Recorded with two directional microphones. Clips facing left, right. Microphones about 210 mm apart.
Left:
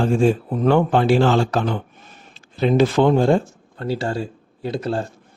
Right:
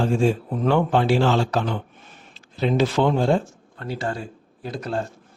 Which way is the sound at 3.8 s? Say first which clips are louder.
Left 5 dB; 30° left (ahead or behind).